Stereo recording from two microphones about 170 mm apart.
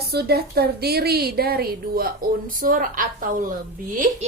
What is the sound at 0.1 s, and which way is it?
A woman's voice, 70° right (ahead or behind).